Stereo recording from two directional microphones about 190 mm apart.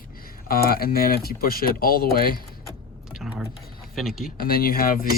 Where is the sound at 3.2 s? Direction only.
5° right (ahead or behind).